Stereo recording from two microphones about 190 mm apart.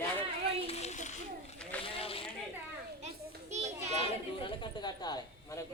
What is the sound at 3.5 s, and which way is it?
Children playing, 35° right (ahead or behind).